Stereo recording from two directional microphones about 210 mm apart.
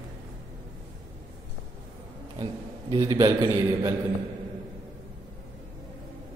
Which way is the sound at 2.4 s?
20° right (ahead or behind).